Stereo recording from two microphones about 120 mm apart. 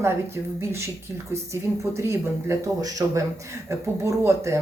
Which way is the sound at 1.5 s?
25° right (ahead or behind).